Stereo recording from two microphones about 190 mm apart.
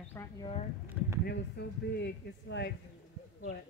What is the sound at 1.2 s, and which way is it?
Speech, 60° left (ahead or behind).